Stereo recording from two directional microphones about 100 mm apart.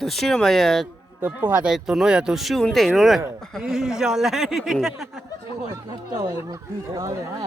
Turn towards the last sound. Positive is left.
turn(degrees=-35)  # may be behind; listen again after turning